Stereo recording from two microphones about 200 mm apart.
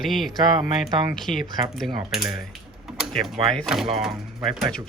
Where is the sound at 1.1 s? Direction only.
Centre (ahead or behind).